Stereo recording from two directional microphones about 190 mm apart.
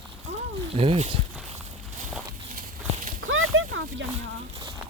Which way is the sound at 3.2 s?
90° right.